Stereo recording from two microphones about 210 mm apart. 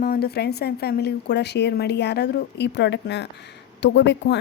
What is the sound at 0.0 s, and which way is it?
A woman's voice, 45° left (ahead or behind).